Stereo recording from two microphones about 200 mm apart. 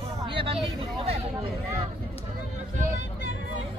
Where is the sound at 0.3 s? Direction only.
25° right (ahead or behind).